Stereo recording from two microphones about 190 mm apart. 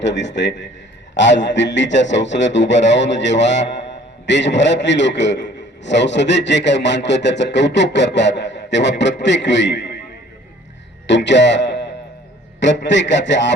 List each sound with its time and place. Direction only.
0.0 s a man's voice: 65° left (ahead or behind)
11.0 s a man's voice: 70° left (ahead or behind)